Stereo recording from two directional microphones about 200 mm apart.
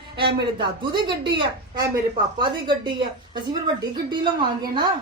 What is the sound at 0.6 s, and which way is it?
Speech, 20° right (ahead or behind).